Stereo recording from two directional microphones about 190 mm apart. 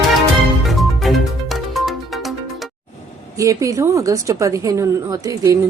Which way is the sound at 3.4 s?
15° right (ahead or behind).